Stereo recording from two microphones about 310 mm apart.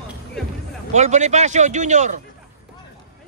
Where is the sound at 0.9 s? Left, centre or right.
Right.